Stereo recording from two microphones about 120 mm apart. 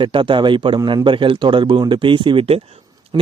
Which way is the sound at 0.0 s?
45° right (ahead or behind).